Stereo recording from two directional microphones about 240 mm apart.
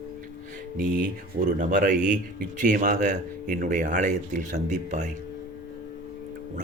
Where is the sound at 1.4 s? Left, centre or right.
Right.